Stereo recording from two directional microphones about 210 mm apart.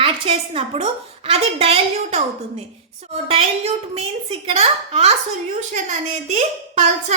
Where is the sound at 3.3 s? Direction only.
30° right (ahead or behind).